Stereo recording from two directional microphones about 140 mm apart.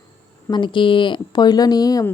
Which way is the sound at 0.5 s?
35° left (ahead or behind).